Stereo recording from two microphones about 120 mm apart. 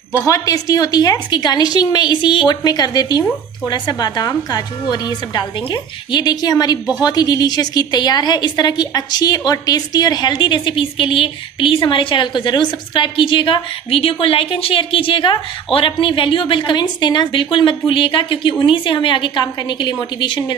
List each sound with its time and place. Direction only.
0.3 s a woman's voice: 30° left (ahead or behind)